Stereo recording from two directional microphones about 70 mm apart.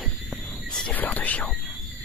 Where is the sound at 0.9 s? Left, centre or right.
Left.